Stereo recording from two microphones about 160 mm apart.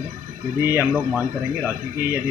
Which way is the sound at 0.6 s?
15° right (ahead or behind).